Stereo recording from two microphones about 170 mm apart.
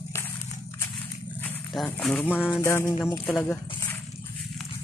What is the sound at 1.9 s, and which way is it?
Speech, 10° left (ahead or behind).